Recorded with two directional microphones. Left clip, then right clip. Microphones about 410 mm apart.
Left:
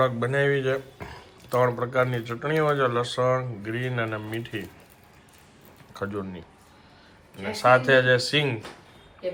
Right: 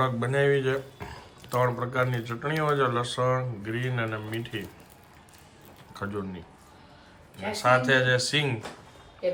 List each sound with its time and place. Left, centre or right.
0.0 s speech: centre
5.9 s speech: centre